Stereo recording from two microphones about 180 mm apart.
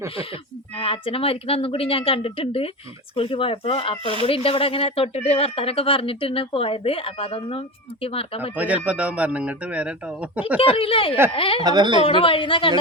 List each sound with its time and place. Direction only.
0.8 s speech: 30° left (ahead or behind)
8.5 s a man's voice: 10° right (ahead or behind)
10.6 s speech: 30° left (ahead or behind)
11.6 s speech: 25° right (ahead or behind)
12.0 s a woman's voice: 30° left (ahead or behind)